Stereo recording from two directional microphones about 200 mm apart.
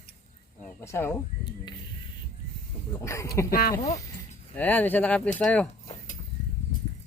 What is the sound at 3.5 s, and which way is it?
Speech, 45° left (ahead or behind).